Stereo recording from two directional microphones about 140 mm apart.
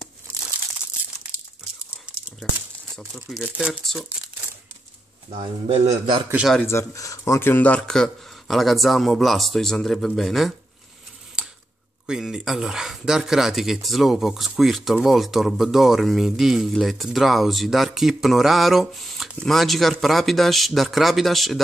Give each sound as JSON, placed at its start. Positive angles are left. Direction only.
{"t": 3.0, "sound": "speech", "side_deg": 0}
{"t": 5.7, "sound": "a man's voice", "side_deg": -40}
{"t": 6.6, "sound": "speech", "side_deg": 20}
{"t": 12.1, "sound": "speech", "side_deg": -5}